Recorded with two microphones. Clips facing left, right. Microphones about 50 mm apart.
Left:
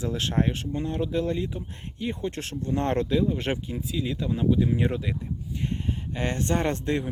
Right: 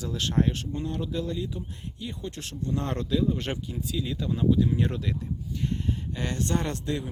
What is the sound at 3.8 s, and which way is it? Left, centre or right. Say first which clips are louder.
Speech: left 2 dB; centre.